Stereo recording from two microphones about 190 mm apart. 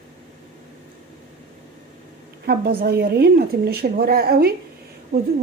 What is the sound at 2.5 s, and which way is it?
A woman's voice, 55° right (ahead or behind).